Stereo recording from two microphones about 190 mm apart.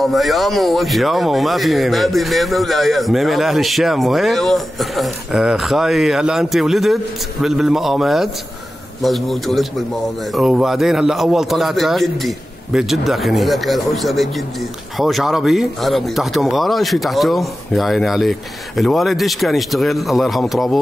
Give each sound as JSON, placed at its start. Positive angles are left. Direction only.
{"t": 0.0, "sound": "a man's voice", "side_deg": 0}